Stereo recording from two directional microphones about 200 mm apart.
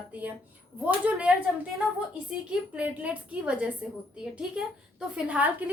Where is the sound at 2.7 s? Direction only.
5° right (ahead or behind).